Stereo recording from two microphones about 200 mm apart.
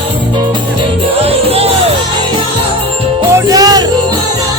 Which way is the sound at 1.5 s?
30° right (ahead or behind).